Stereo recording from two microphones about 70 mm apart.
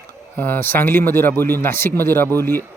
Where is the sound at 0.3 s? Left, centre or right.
Left.